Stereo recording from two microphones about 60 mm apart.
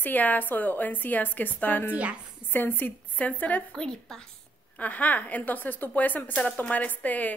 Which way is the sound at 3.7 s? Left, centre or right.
Centre.